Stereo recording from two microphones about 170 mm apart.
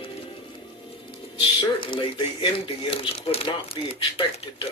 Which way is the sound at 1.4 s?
30° left (ahead or behind).